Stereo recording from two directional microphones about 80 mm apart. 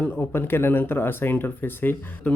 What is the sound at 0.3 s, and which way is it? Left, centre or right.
Speech, left.